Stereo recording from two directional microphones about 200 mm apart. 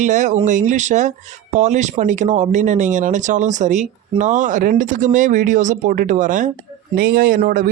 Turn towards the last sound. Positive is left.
turn(degrees=-45)  # may be behind; listen again after turning